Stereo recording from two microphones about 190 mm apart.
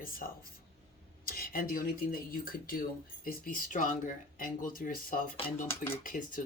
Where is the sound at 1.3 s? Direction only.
50° left (ahead or behind).